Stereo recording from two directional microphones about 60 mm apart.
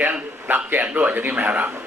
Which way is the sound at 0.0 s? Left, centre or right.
Right.